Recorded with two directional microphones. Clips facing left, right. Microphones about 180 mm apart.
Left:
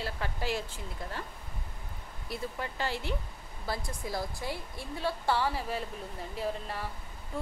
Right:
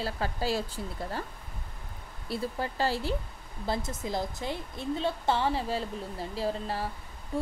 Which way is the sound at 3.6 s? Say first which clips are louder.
Right 4 dB; 25° right (ahead or behind).